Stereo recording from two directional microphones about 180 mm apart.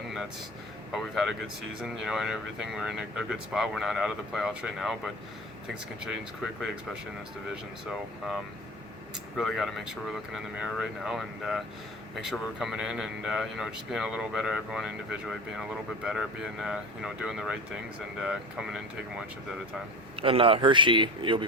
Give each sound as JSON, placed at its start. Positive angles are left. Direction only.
{"t": 0.9, "sound": "speech", "side_deg": 0}
{"t": 9.4, "sound": "speech", "side_deg": 0}
{"t": 20.2, "sound": "a man's voice", "side_deg": -30}